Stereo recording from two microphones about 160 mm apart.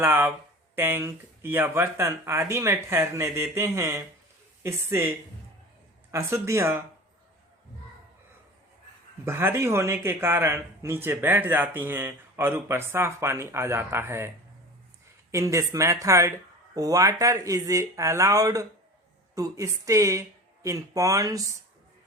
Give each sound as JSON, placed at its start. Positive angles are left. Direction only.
{"t": 0.0, "sound": "a man's voice", "side_deg": -15}
{"t": 9.2, "sound": "a man's voice", "side_deg": -15}
{"t": 15.3, "sound": "speech", "side_deg": -20}